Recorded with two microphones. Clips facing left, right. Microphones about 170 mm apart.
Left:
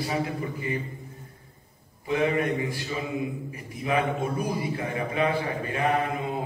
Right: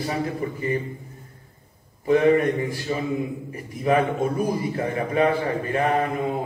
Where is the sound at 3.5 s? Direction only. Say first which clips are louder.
Right 9 dB; 45° right (ahead or behind).